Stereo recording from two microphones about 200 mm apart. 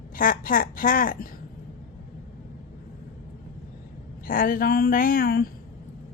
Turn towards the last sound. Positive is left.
turn(degrees=45)  # may be behind; listen again after turning